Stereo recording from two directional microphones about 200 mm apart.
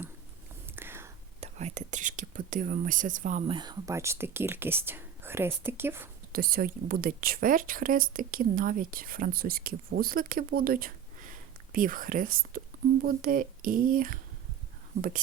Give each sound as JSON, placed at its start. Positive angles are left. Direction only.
{"t": 0.8, "sound": "whispering", "side_deg": -10}
{"t": 1.4, "sound": "speech", "side_deg": -35}
{"t": 3.5, "sound": "speech", "side_deg": -20}
{"t": 6.3, "sound": "a woman's voice", "side_deg": -45}